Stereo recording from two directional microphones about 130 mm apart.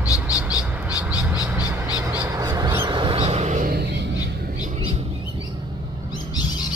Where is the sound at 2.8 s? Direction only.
40° right (ahead or behind).